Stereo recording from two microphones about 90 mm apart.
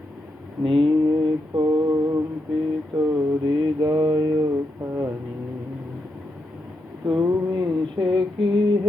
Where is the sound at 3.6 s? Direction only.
45° right (ahead or behind).